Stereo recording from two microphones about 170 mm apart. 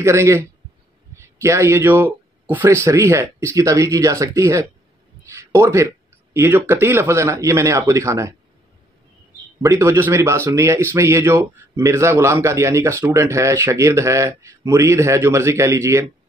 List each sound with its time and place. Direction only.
0.0 s speech: 15° right (ahead or behind)
5.2 s a sound: 15° right (ahead or behind)
6.7 s speech: 15° right (ahead or behind)
9.6 s speech: 15° right (ahead or behind)